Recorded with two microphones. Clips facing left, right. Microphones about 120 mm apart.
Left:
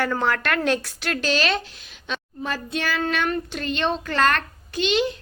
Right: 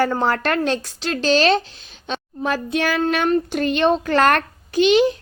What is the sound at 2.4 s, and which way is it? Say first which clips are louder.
Speech: right 7 dB; 55° right (ahead or behind).